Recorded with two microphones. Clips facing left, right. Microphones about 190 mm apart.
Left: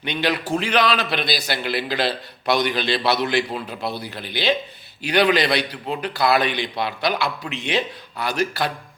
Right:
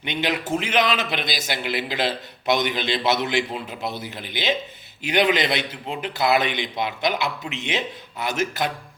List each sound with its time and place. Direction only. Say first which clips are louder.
0.0 s a man's voice: left 2 dB; 20° right (ahead or behind)